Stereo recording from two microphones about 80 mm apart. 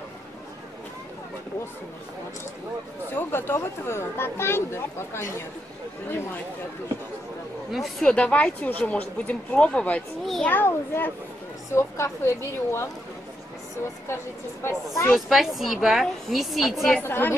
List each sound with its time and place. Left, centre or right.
3.2 s a child's voice: left
7.7 s a woman's voice: centre
8.1 s speech: centre
10.5 s a child's voice: left
11.7 s speech: left
14.0 s speech: left
15.1 s a woman's voice: centre
17.0 s a child's voice: left